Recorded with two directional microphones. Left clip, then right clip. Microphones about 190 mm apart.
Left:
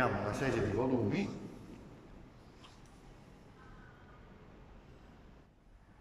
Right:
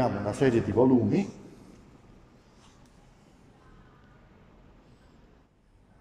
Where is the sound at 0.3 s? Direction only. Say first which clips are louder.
Right 9 dB; 40° right (ahead or behind).